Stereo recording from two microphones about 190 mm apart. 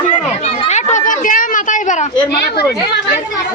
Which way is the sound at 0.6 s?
40° left (ahead or behind).